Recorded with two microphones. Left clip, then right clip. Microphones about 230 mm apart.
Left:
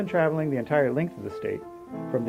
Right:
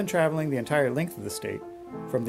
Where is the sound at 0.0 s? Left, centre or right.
Right.